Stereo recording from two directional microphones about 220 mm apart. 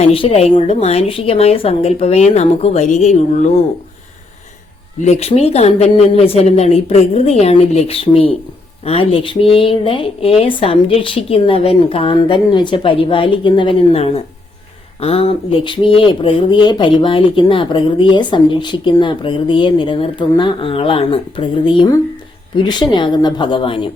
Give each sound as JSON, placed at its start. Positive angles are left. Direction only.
{"t": 0.0, "sound": "speech", "side_deg": 25}
{"t": 5.0, "sound": "speech", "side_deg": 30}